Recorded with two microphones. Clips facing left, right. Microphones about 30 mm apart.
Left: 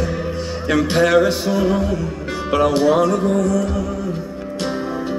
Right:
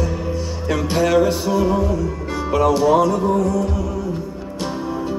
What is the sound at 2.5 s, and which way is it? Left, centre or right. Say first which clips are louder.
Music: even; left.